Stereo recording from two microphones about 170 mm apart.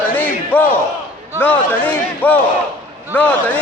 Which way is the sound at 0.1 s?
10° left (ahead or behind).